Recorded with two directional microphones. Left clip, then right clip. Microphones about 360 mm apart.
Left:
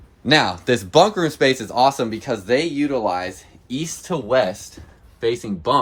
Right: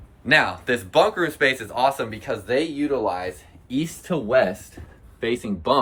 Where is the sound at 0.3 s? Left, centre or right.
Centre.